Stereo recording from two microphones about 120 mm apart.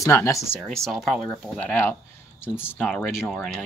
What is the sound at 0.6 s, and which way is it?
Speech, 5° left (ahead or behind).